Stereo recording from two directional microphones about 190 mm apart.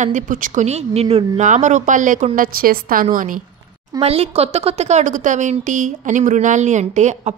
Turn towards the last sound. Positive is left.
turn(degrees=-40)  # may be behind; listen again after turning